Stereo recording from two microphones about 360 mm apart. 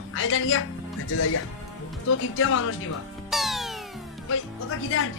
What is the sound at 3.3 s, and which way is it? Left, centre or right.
Music, centre.